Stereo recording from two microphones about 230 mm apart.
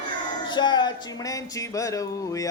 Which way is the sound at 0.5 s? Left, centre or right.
Centre.